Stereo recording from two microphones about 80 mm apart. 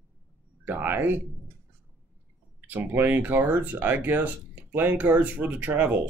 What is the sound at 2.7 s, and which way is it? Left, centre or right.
Speech, right.